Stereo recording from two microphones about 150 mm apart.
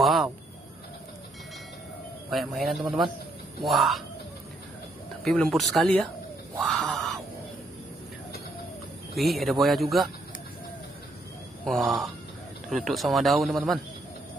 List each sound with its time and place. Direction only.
0.0 s a sound: centre (ahead or behind)
2.2 s speech: centre (ahead or behind)
5.2 s speech: 5° left (ahead or behind)
6.6 s a sound: centre (ahead or behind)
9.1 s speech: centre (ahead or behind)
11.6 s speech: centre (ahead or behind)